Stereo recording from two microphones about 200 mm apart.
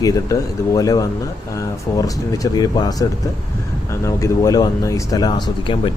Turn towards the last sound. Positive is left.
turn(degrees=20)  # may be behind; listen again after turning